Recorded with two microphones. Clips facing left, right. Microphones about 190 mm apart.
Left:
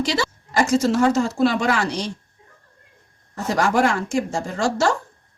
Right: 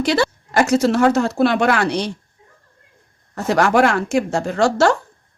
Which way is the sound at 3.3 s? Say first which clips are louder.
Right 4 dB; 65° right (ahead or behind).